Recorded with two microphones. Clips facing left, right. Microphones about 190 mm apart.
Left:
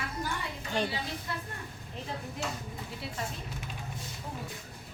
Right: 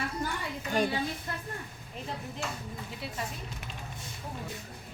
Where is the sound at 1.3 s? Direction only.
45° right (ahead or behind).